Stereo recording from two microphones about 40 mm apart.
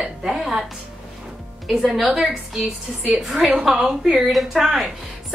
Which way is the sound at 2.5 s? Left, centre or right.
Centre.